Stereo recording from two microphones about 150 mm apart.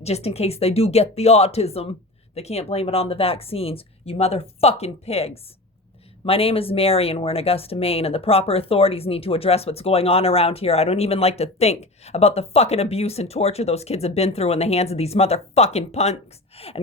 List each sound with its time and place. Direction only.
0.0 s speech: 45° left (ahead or behind)